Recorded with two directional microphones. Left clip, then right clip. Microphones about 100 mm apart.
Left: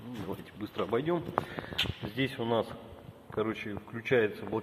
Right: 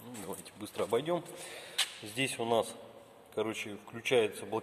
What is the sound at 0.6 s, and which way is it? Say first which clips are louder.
Speech: even; 25° right (ahead or behind).